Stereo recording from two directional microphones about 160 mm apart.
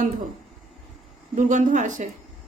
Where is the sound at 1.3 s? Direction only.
50° right (ahead or behind).